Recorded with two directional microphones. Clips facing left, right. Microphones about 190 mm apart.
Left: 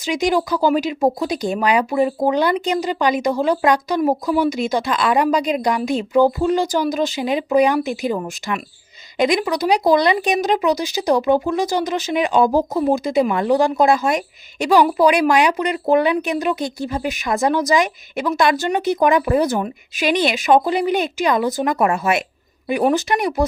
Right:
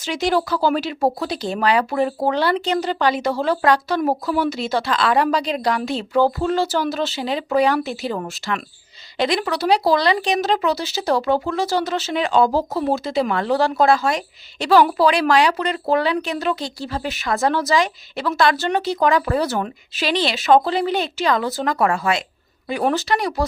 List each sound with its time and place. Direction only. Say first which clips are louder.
0.0 s speech: left 2 dB; 15° left (ahead or behind)